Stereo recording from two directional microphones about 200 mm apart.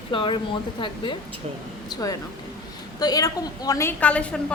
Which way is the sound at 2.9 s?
20° left (ahead or behind).